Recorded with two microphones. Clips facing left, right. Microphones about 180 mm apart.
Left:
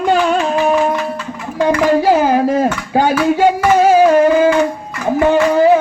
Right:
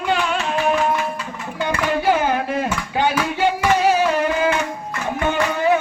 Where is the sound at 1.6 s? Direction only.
35° left (ahead or behind).